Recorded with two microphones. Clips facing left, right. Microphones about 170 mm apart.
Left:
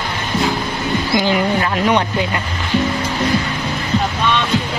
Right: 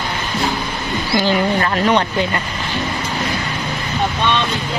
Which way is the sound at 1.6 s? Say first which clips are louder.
Even; 10° left (ahead or behind).